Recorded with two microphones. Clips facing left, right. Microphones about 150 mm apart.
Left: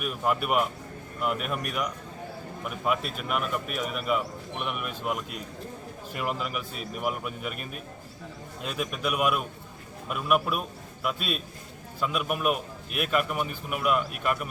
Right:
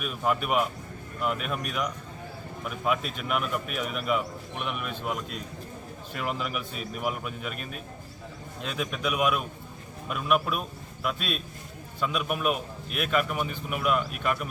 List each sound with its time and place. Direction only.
0.0 s a man's voice: 5° left (ahead or behind)